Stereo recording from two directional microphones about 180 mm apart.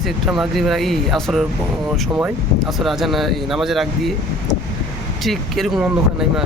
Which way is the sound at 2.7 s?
Centre (ahead or behind).